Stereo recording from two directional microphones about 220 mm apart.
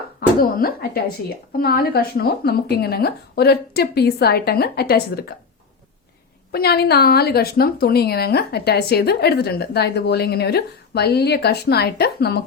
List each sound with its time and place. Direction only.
0.2 s a woman's voice: 45° left (ahead or behind)
6.5 s a woman's voice: 45° left (ahead or behind)